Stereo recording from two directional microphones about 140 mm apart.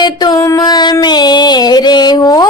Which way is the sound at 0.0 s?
30° left (ahead or behind).